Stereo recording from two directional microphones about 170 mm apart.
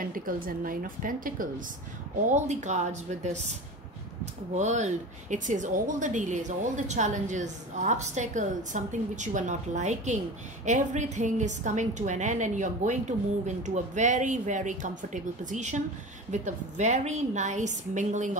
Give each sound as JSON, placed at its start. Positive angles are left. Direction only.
{"t": 0.0, "sound": "a woman's voice", "side_deg": -55}
{"t": 4.6, "sound": "a woman's voice", "side_deg": -45}